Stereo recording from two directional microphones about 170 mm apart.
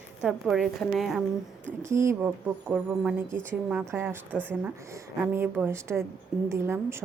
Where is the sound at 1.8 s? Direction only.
15° right (ahead or behind).